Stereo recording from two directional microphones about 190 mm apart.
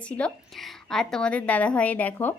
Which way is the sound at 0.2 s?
5° left (ahead or behind).